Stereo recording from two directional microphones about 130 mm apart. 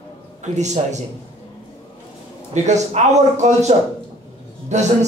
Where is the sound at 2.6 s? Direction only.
60° right (ahead or behind).